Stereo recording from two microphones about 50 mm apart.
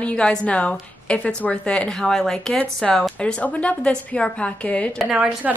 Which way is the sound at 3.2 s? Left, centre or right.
Left.